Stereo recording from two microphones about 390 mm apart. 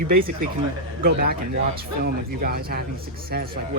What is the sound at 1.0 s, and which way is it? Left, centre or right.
Speech, right.